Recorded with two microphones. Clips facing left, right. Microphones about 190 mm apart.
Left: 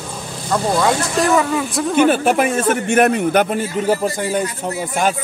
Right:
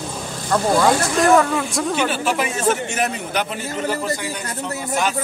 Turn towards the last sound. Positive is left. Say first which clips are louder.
# left 3 dB
turn(degrees=45)  # may be behind; listen again after turning